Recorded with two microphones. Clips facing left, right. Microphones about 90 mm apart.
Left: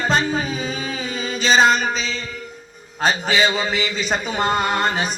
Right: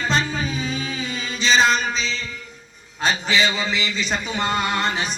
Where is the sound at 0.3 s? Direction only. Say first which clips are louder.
Left 3 dB; 40° left (ahead or behind).